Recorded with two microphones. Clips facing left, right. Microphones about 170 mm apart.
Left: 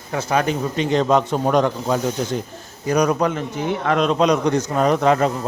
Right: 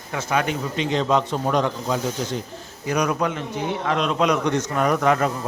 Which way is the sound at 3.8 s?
55° left (ahead or behind).